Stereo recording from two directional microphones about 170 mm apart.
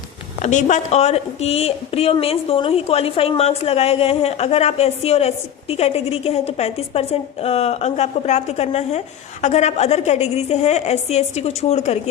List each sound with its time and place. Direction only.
0.4 s a woman's voice: 45° left (ahead or behind)